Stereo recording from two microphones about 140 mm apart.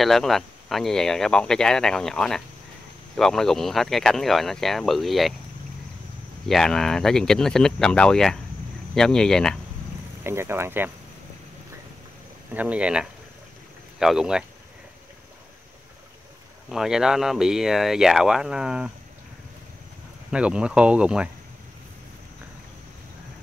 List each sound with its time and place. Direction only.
0.0 s speech: centre (ahead or behind)
6.4 s speech: 5° left (ahead or behind)
10.2 s speech: 15° right (ahead or behind)
12.5 s speech: 10° right (ahead or behind)
16.6 s speech: 5° right (ahead or behind)
20.2 s speech: 5° right (ahead or behind)